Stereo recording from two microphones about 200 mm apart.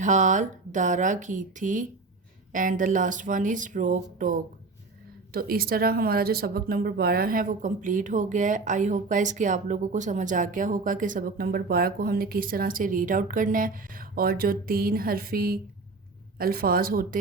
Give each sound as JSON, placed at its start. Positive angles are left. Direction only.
{"t": 0.0, "sound": "speech", "side_deg": -40}